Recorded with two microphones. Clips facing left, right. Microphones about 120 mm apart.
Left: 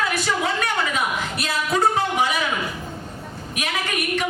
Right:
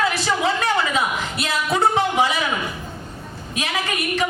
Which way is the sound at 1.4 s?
25° right (ahead or behind).